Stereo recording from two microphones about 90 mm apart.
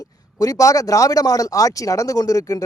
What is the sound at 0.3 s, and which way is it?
Speech, 40° left (ahead or behind).